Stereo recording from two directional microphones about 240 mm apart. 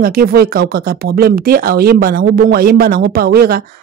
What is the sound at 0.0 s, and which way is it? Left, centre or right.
Speech, right.